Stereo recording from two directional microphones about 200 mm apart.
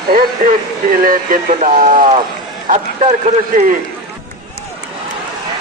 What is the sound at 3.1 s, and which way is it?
Speech, 40° right (ahead or behind).